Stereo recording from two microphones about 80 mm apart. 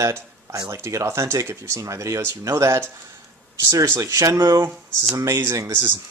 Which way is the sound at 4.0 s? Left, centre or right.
Right.